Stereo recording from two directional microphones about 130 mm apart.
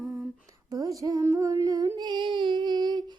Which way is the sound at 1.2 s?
20° right (ahead or behind).